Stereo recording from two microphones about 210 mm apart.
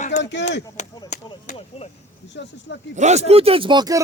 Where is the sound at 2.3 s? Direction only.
55° left (ahead or behind).